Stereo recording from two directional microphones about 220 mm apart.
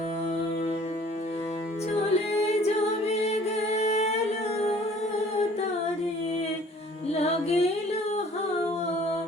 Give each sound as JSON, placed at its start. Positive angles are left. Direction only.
{"t": 2.5, "sound": "singing", "side_deg": 30}
{"t": 7.1, "sound": "music", "side_deg": 30}